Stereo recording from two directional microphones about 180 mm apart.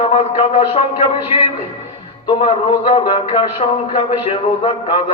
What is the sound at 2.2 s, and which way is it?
A man's voice, 25° left (ahead or behind).